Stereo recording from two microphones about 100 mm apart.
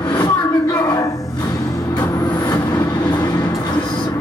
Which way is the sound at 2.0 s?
35° left (ahead or behind).